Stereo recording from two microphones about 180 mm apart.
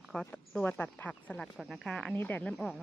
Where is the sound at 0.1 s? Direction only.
5° left (ahead or behind).